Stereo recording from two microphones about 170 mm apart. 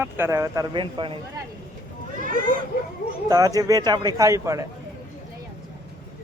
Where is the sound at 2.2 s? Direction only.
55° right (ahead or behind).